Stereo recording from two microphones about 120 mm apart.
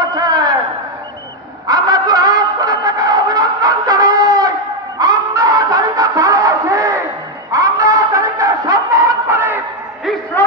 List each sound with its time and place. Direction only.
0.0 s a sound: 30° right (ahead or behind)
1.7 s music: 30° right (ahead or behind)
7.5 s snicker: 25° right (ahead or behind)